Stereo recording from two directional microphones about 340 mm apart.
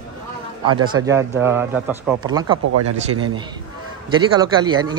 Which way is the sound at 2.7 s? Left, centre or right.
Right.